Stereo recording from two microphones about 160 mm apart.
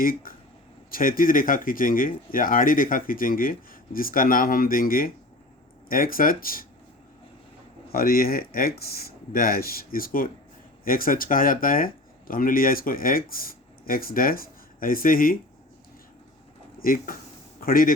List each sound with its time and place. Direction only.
0.0 s speech: 60° left (ahead or behind)
7.9 s speech: 70° left (ahead or behind)
16.8 s speech: 60° left (ahead or behind)